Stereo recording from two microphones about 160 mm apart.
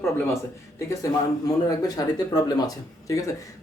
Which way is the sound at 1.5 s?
20° left (ahead or behind).